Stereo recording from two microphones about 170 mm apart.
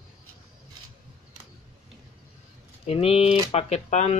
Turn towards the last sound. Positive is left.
turn(degrees=40)  # may be behind; listen again after turning